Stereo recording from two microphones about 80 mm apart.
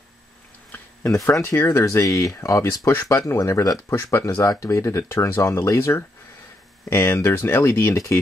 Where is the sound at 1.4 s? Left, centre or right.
Left.